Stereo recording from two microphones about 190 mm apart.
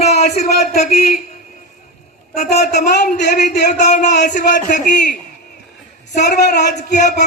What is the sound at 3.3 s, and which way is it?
Speech, 40° left (ahead or behind).